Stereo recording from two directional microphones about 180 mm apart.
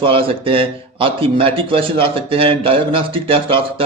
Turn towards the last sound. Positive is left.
turn(degrees=-30)  # may be behind; listen again after turning